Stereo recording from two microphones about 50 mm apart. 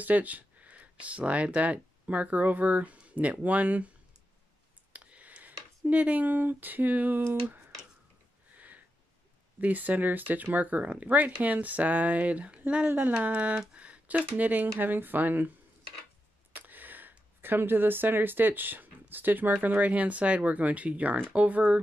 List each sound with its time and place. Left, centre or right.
0.0 s speech: right
4.9 s a sound: right
8.5 s a sound: right
9.6 s speech: right
12.8 s speech: right
13.1 s speech: right
16.5 s speech: right